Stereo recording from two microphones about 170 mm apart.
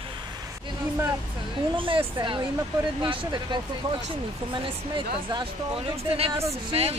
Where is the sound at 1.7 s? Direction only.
30° right (ahead or behind).